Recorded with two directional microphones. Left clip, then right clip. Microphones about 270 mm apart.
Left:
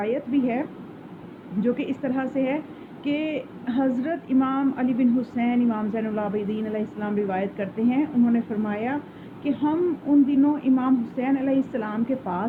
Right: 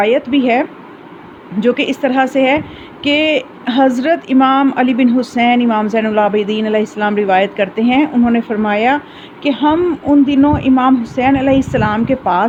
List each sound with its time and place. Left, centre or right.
0.0 s speech: right